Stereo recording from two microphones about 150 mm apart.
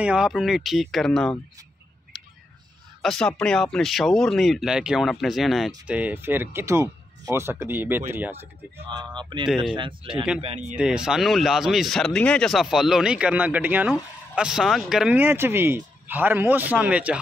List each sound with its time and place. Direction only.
0.0 s speech: 5° right (ahead or behind)
3.0 s speech: 5° left (ahead or behind); by 8.5 s 15° right (ahead or behind)
10.4 s speech: 45° right (ahead or behind)
10.8 s speech: 5° right (ahead or behind)